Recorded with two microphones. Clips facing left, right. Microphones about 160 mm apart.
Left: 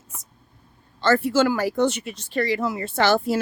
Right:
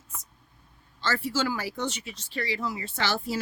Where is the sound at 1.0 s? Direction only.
55° left (ahead or behind).